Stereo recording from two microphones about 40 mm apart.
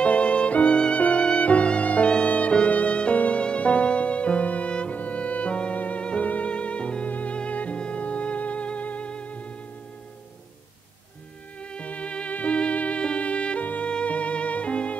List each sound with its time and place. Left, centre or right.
0.0 s music: left
6.0 s violin: left
7.1 s music: left
11.6 s music: left